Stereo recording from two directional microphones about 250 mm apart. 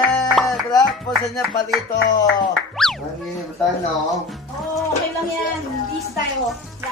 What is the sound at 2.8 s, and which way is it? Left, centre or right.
Boing, centre.